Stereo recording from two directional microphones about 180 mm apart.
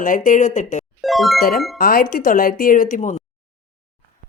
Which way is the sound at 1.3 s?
55° left (ahead or behind).